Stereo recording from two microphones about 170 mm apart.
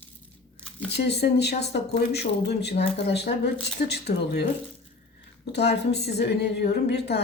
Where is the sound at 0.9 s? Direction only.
75° left (ahead or behind).